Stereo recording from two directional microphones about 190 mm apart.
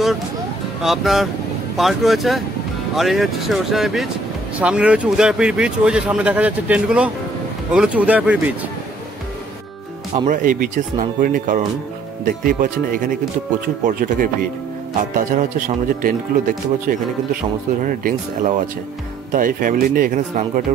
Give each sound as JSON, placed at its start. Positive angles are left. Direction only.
{"t": 0.8, "sound": "speech", "side_deg": 0}
{"t": 10.2, "sound": "speech", "side_deg": -45}
{"t": 17.8, "sound": "speech", "side_deg": -45}